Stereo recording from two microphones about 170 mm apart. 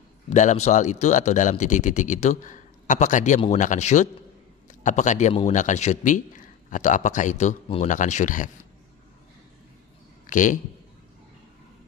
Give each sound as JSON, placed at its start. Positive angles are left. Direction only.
{"t": 0.3, "sound": "a man's voice", "side_deg": 45}
{"t": 10.2, "sound": "a man's voice", "side_deg": 50}